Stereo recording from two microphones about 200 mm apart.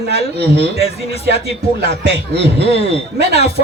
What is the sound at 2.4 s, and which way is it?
Speech, 30° left (ahead or behind).